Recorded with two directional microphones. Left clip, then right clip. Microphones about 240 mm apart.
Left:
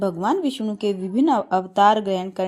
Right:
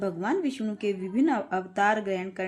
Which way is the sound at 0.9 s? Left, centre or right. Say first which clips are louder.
Left 5 dB; centre.